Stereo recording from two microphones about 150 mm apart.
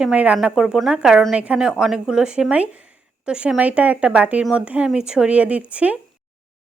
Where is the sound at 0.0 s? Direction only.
10° right (ahead or behind).